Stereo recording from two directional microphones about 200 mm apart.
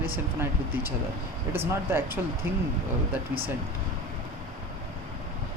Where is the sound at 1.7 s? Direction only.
10° right (ahead or behind).